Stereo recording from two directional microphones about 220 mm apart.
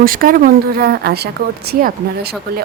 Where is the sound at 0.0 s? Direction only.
40° right (ahead or behind).